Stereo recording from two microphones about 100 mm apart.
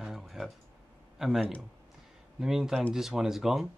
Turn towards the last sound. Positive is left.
turn(degrees=-5)  # may be behind; listen again after turning